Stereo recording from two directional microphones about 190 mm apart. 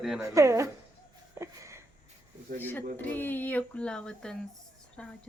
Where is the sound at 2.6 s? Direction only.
10° left (ahead or behind).